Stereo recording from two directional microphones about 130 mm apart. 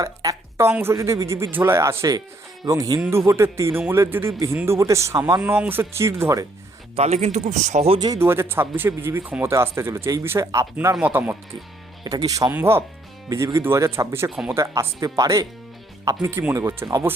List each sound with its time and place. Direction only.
0.0 s speech: 25° right (ahead or behind)
5.4 s speech: 15° right (ahead or behind)
6.9 s a man's voice: 55° right (ahead or behind)
7.9 s speech: 35° right (ahead or behind)
8.2 s speech: 20° right (ahead or behind)
10.9 s speech: 10° right (ahead or behind)
12.0 s speech: 30° right (ahead or behind)
14.3 s speech: 5° right (ahead or behind)
14.5 s speech: 25° right (ahead or behind)